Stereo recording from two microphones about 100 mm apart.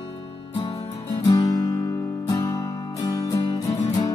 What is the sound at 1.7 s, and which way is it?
Music, 25° left (ahead or behind).